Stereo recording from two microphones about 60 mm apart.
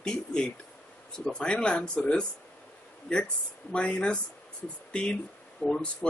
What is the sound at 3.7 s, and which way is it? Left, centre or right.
Speech, centre.